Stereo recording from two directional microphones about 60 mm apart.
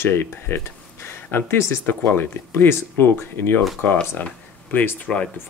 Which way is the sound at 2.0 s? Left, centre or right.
Left.